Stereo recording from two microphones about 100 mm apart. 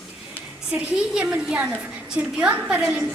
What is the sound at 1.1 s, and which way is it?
A woman's voice, 10° right (ahead or behind).